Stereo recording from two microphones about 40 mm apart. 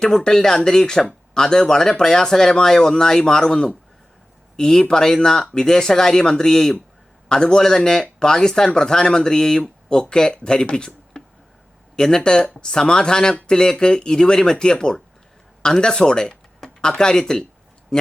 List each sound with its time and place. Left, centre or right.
0.0 s speech: centre
16.6 s a sound: centre
17.0 s speech: centre